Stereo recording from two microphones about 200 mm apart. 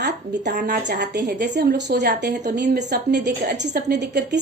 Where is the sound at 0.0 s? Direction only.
55° right (ahead or behind).